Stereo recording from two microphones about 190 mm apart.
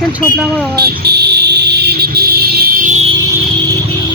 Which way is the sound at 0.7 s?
55° right (ahead or behind).